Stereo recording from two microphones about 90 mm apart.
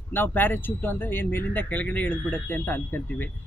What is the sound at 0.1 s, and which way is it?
Speech, 20° left (ahead or behind).